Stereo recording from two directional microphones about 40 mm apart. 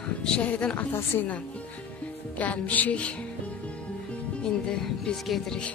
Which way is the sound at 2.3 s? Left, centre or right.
Left.